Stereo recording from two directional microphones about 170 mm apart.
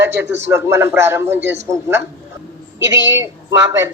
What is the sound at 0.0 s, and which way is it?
A man's voice, 10° right (ahead or behind).